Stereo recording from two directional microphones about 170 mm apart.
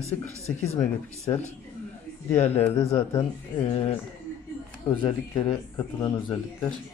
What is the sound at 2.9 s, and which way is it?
Speech, 35° left (ahead or behind).